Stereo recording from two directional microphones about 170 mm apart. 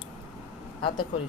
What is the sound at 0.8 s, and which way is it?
Speech, 30° left (ahead or behind).